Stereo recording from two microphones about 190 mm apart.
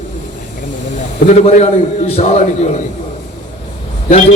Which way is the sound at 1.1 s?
40° left (ahead or behind).